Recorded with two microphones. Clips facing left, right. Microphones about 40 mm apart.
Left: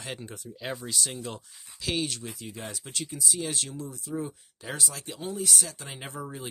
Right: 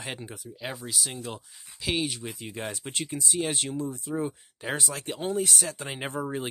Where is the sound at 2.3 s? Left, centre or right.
Right.